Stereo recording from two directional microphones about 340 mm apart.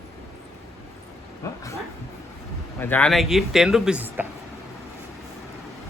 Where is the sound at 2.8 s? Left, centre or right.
Centre.